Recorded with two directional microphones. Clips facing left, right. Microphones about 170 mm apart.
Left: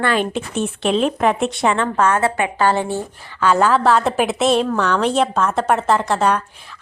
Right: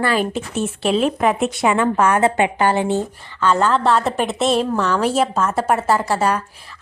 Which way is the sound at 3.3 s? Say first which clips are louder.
Left 2 dB; 10° left (ahead or behind).